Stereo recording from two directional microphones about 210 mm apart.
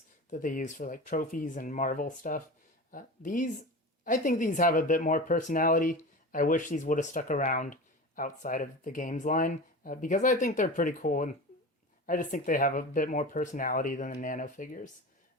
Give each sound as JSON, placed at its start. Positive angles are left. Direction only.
{"t": 0.3, "sound": "speech", "side_deg": 40}